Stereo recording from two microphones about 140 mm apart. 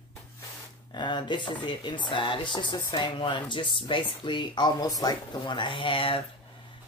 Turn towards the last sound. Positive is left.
turn(degrees=40)  # may be behind; listen again after turning